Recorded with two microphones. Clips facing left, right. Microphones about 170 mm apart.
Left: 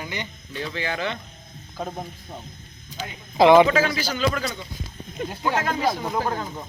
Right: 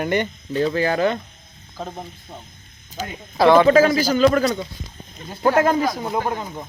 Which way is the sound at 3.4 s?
15° left (ahead or behind).